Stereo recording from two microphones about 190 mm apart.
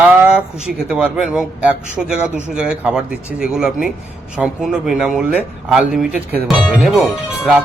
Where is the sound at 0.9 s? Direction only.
5° right (ahead or behind).